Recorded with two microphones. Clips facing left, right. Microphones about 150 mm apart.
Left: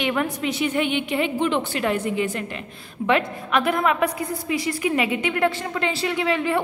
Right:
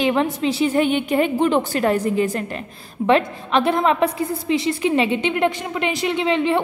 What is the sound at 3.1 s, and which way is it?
A woman's voice, 30° right (ahead or behind).